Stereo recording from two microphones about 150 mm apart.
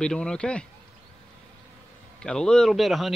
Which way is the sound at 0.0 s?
5° left (ahead or behind).